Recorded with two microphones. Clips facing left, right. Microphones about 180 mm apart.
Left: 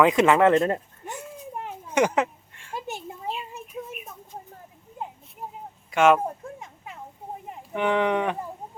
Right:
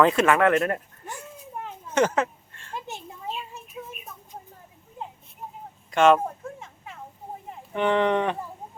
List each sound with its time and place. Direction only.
0.0 s speech: 15° left (ahead or behind)
1.9 s a sound: 15° left (ahead or behind)
5.9 s speech: 10° left (ahead or behind)
7.7 s speech: 10° left (ahead or behind)